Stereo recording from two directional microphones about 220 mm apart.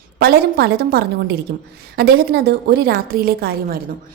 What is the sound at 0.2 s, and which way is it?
A woman's voice, 45° right (ahead or behind).